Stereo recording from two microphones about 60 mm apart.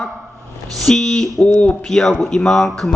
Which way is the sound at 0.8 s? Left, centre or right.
Centre.